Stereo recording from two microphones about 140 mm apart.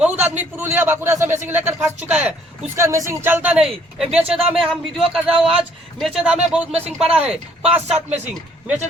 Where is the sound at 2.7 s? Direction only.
20° right (ahead or behind).